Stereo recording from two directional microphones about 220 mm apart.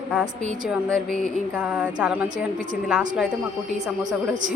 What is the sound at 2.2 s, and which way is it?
Speech, 35° right (ahead or behind).